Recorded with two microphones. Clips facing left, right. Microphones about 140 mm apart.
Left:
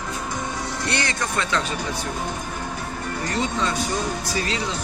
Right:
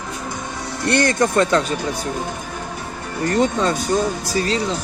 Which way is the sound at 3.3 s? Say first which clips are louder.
Right 7 dB; 45° right (ahead or behind).